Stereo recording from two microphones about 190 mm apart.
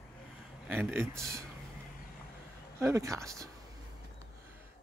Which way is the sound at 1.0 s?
5° left (ahead or behind).